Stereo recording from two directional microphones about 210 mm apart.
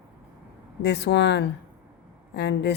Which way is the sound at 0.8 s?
55° left (ahead or behind).